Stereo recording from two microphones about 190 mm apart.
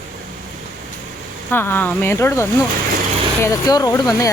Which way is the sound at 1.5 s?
10° left (ahead or behind).